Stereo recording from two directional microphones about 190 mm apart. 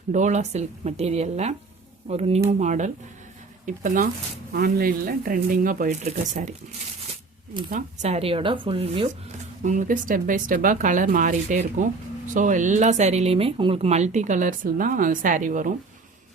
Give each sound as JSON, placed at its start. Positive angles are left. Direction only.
{"t": 0.1, "sound": "speech", "side_deg": -40}
{"t": 7.7, "sound": "speech", "side_deg": -40}
{"t": 9.6, "sound": "speech", "side_deg": -45}